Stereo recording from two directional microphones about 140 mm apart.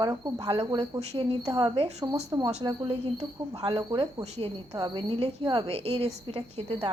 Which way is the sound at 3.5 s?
30° right (ahead or behind).